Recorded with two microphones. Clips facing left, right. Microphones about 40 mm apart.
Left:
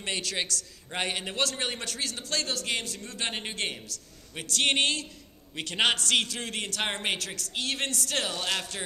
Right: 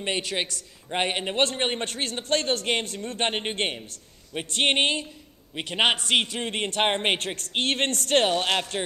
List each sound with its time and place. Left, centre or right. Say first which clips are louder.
0.0 s a man's voice: right 4 dB; right